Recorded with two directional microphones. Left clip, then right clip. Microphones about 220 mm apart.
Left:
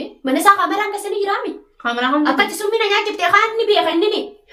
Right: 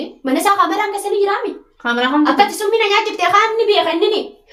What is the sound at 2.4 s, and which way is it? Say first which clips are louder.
A child's voice: right 3 dB; centre (ahead or behind).